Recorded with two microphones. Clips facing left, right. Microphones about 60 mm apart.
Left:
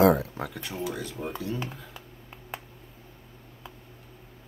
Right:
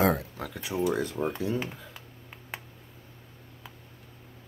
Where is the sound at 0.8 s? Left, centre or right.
Right.